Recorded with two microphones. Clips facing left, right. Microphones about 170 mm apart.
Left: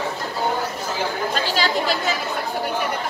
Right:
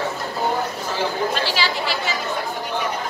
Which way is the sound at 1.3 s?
45° left (ahead or behind).